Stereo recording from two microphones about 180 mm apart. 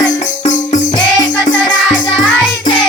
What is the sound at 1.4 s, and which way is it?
Music, 25° left (ahead or behind).